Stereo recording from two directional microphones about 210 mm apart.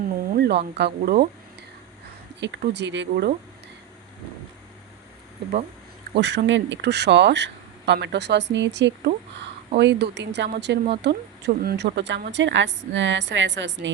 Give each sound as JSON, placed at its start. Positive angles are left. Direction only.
{"t": 0.3, "sound": "speech", "side_deg": -50}
{"t": 2.4, "sound": "speech", "side_deg": -55}
{"t": 6.1, "sound": "speech", "side_deg": -55}